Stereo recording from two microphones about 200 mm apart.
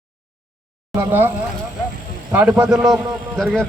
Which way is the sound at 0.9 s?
10° right (ahead or behind).